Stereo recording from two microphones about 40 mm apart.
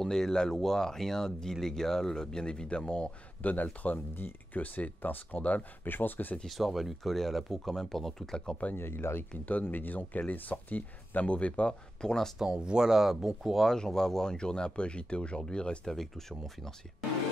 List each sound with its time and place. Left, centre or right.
0.0 s speech: centre
3.6 s speech: left
5.9 s speech: left
6.4 s speech: centre
8.7 s speech: left
9.3 s speech: left
11.3 s speech: left
12.4 s speech: right
12.8 s speech: centre
13.7 s speech: centre
15.8 s speech: centre